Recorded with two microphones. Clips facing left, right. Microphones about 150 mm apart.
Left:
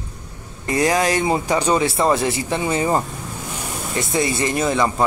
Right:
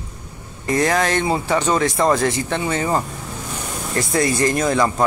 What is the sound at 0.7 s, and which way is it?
Speech, 10° left (ahead or behind).